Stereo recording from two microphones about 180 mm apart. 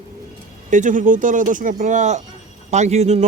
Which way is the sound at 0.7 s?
45° right (ahead or behind).